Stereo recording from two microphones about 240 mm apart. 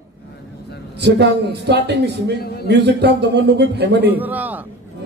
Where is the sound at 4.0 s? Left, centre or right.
Centre.